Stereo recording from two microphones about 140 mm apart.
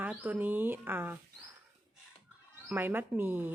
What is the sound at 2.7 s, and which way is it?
Speech, 15° right (ahead or behind).